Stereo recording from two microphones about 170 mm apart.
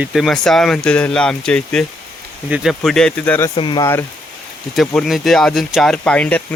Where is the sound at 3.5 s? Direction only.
30° left (ahead or behind).